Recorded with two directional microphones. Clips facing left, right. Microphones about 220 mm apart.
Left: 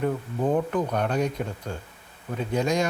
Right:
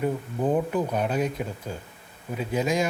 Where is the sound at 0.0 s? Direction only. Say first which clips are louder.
Even; 5° right (ahead or behind).